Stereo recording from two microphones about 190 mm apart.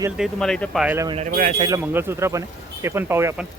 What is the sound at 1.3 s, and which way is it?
Speech, 45° right (ahead or behind).